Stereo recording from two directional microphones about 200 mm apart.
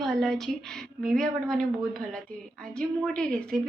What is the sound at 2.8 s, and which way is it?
Speech, 5° left (ahead or behind).